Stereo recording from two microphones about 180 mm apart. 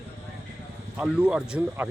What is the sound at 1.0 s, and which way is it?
Speech, 5° right (ahead or behind).